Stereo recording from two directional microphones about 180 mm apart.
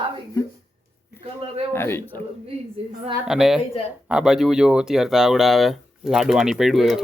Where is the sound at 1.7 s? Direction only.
15° left (ahead or behind).